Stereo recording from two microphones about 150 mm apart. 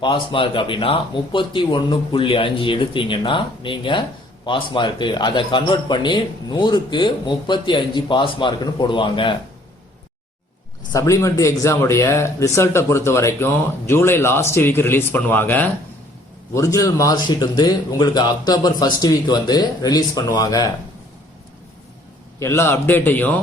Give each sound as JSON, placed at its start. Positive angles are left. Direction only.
{"t": 0.0, "sound": "speech", "side_deg": 35}
{"t": 10.9, "sound": "speech", "side_deg": 20}
{"t": 22.4, "sound": "speech", "side_deg": 15}